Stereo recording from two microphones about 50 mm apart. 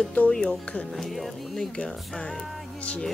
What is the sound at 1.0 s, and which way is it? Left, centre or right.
Speech, centre.